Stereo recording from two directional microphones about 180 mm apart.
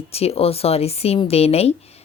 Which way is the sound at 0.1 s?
35° left (ahead or behind).